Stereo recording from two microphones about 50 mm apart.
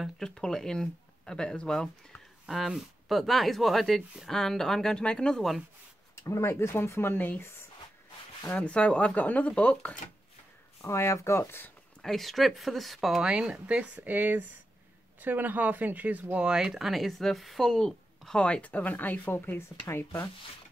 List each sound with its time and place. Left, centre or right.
0.3 s speech: centre
2.4 s speech: centre
6.2 s speech: left
8.4 s speech: left
10.8 s speech: left
12.0 s speech: centre
13.2 s speech: centre
14.0 s speech: right
16.4 s speech: centre
18.4 s speech: left